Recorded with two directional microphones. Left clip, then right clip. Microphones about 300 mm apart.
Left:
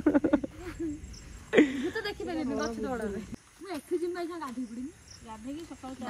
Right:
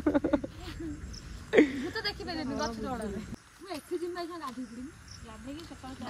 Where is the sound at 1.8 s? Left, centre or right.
Right.